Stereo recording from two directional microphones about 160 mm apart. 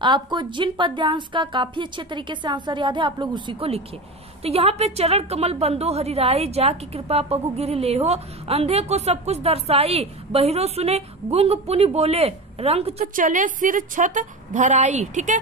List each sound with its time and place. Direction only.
0.0 s a woman's voice: 30° right (ahead or behind)
13.0 s a woman's voice: 55° right (ahead or behind)